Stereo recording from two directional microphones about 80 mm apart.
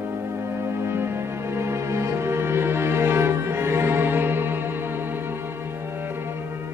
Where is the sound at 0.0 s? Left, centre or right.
Right.